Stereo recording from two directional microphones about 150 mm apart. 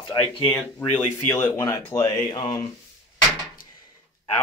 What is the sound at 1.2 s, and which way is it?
Speech, 15° left (ahead or behind).